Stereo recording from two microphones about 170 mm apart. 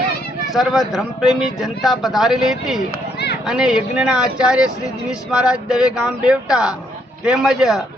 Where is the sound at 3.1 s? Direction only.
75° left (ahead or behind).